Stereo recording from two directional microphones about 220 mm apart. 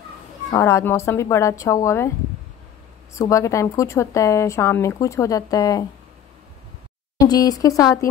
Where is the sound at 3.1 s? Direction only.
15° left (ahead or behind).